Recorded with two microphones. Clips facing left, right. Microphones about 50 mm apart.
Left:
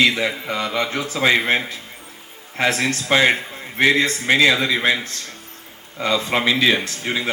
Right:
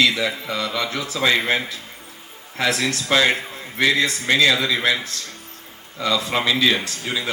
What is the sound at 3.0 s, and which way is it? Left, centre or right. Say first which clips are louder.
A man's voice: left 2 dB; left.